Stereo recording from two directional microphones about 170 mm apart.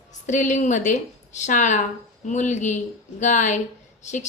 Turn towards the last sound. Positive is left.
turn(degrees=45)  # may be behind; listen again after turning